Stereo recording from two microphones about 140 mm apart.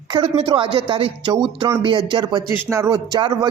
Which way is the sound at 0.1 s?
35° right (ahead or behind).